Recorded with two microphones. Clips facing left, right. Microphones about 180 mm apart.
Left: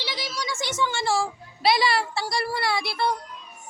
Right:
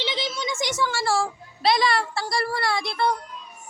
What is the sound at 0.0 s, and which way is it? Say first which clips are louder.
A woman's voice: right 4 dB; 20° right (ahead or behind).